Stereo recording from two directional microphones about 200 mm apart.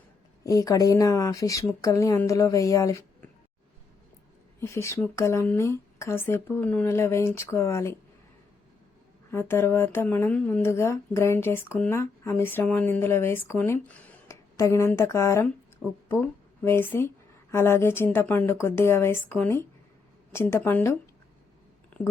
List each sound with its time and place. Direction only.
0.4 s speech: 15° left (ahead or behind)
4.6 s speech: 15° left (ahead or behind)
9.3 s a woman's voice: 10° left (ahead or behind)